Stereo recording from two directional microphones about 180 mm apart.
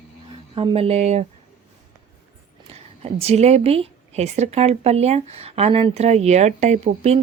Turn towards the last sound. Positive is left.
turn(degrees=-35)  # may be behind; listen again after turning